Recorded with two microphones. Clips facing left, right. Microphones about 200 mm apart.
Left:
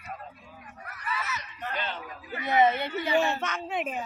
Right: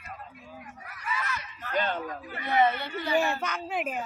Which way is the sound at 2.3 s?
20° left (ahead or behind).